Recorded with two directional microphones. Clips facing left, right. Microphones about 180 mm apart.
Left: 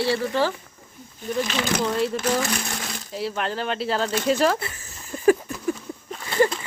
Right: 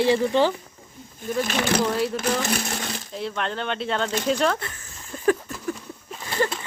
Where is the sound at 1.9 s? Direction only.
Centre (ahead or behind).